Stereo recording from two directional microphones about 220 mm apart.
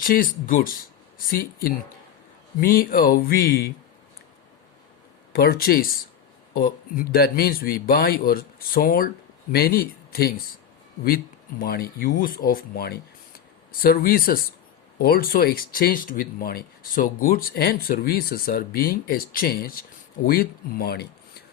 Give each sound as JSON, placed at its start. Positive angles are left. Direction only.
{"t": 0.0, "sound": "speech", "side_deg": 40}
{"t": 5.3, "sound": "speech", "side_deg": 45}
{"t": 11.6, "sound": "speech", "side_deg": 45}